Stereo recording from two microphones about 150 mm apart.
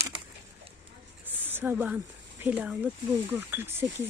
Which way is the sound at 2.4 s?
10° right (ahead or behind).